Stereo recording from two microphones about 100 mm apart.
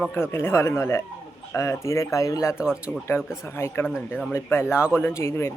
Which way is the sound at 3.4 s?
25° left (ahead or behind).